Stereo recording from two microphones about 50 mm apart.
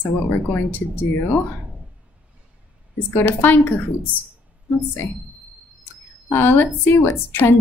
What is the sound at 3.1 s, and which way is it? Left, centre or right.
Speech, left.